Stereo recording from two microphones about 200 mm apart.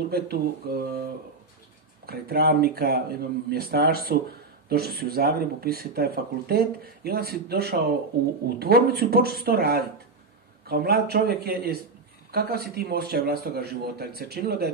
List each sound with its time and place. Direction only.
0.1 s speech: 50° right (ahead or behind)
2.0 s speech: 50° right (ahead or behind)